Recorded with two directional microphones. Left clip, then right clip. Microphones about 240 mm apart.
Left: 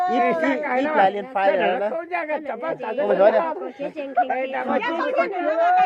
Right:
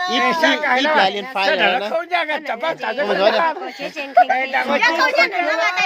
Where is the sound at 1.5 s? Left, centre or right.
Right.